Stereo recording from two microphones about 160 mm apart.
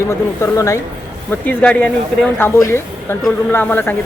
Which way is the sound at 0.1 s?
20° left (ahead or behind).